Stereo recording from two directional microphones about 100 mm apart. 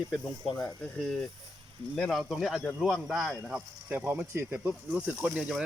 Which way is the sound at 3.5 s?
15° right (ahead or behind).